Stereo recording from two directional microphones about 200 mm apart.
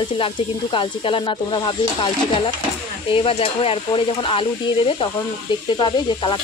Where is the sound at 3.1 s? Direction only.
25° left (ahead or behind).